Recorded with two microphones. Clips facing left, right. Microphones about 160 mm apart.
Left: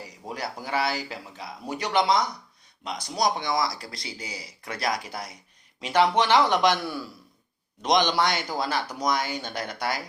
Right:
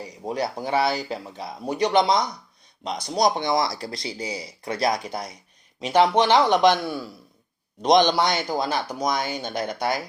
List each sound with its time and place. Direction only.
0.0 s speech: 20° right (ahead or behind)